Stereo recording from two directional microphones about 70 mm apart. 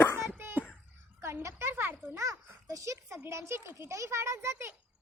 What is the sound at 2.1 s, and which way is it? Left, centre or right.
A child's voice, right.